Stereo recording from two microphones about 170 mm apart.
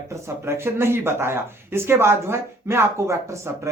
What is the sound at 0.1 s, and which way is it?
Speech, 15° right (ahead or behind).